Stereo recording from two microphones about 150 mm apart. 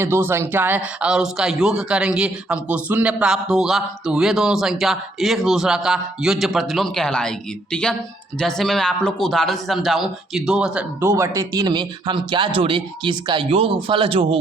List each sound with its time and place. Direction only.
0.0 s speech: 15° right (ahead or behind)
11.0 s speech: 15° right (ahead or behind); by 14.3 s 35° right (ahead or behind)